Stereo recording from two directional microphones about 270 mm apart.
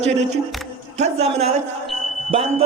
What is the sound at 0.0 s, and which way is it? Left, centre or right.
Speech, right.